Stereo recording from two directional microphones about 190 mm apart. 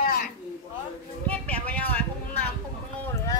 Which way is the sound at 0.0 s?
50° left (ahead or behind).